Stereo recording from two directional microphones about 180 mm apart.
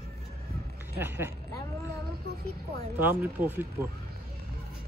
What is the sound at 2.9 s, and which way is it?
Speech, 10° right (ahead or behind).